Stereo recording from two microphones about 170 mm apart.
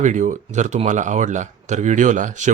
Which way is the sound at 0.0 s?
45° right (ahead or behind).